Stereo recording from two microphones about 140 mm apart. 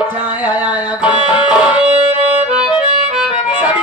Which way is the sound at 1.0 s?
35° left (ahead or behind).